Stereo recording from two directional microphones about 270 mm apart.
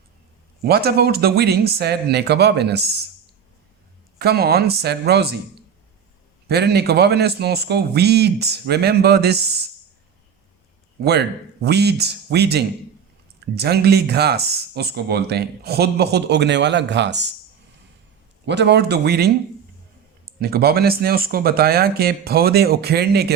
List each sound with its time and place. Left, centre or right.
0.6 s speech: right
4.2 s speech: right
6.5 s speech: right
11.0 s speech: right
18.4 s speech: right